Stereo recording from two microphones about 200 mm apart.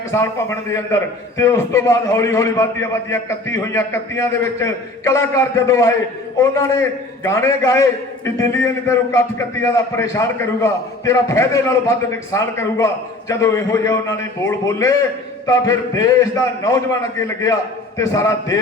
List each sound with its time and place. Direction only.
0.1 s a man's voice: 15° left (ahead or behind)